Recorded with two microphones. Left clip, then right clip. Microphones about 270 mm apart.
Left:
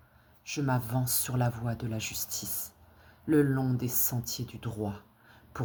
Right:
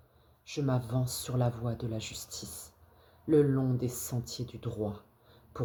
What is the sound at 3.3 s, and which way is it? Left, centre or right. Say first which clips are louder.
Speech: even; left.